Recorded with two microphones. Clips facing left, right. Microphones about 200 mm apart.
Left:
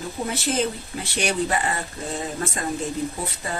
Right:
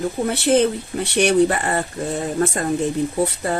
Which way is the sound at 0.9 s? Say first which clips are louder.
Right 10 dB; 60° right (ahead or behind).